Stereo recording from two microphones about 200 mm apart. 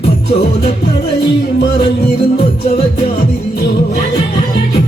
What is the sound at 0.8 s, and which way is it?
Music, 55° left (ahead or behind).